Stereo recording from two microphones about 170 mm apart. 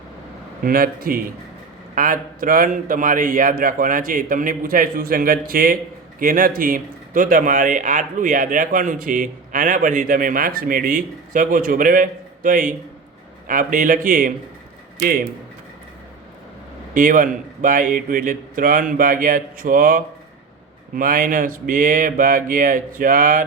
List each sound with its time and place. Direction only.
0.6 s a man's voice: 60° right (ahead or behind)
16.9 s a man's voice: 50° right (ahead or behind)